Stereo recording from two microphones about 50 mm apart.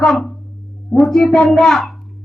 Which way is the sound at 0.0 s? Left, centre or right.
Centre.